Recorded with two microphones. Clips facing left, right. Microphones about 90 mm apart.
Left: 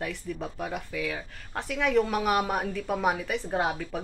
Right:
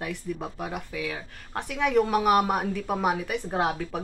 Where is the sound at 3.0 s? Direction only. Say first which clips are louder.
Even; 15° right (ahead or behind).